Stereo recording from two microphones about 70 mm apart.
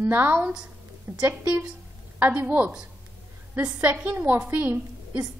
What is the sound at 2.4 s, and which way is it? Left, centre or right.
A woman's voice, right.